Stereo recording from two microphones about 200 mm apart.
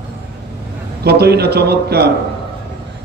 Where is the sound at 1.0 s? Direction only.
55° right (ahead or behind).